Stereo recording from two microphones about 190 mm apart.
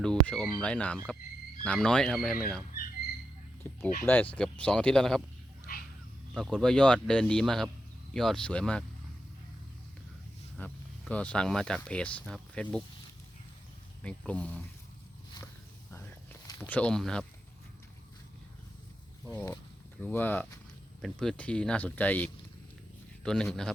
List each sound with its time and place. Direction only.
0.0 s speech: 5° left (ahead or behind)
3.6 s speech: 10° left (ahead or behind)
6.3 s speech: centre (ahead or behind)
10.6 s speech: 5° left (ahead or behind)
14.0 s speech: 5° left (ahead or behind)
16.6 s speech: 10° left (ahead or behind)
19.3 s speech: 15° left (ahead or behind)